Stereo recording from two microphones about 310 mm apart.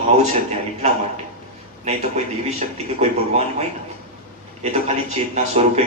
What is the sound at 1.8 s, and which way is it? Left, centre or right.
Speech, right.